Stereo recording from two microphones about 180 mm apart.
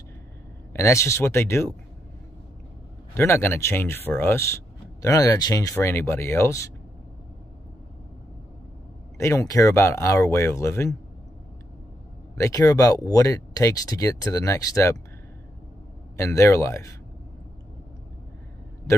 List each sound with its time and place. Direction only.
0.7 s speech: 15° left (ahead or behind)
3.2 s speech: 15° left (ahead or behind)
9.2 s speech: 20° left (ahead or behind)
12.4 s speech: 15° left (ahead or behind)
16.2 s speech: 15° left (ahead or behind)